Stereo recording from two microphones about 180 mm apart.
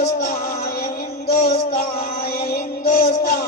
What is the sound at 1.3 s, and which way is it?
Music, 60° left (ahead or behind).